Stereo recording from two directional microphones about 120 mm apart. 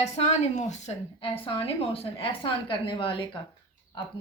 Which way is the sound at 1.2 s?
50° left (ahead or behind).